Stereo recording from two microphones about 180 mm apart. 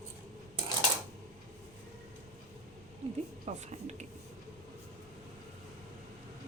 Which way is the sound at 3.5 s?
40° right (ahead or behind).